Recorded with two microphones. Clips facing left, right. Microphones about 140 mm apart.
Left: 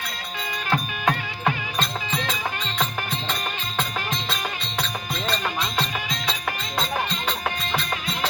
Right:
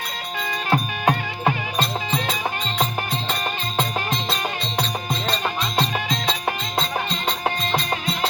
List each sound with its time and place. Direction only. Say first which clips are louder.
0.7 s music: right 3 dB; 35° right (ahead or behind)